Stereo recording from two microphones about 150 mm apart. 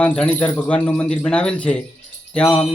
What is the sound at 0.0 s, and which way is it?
Speech, 5° left (ahead or behind).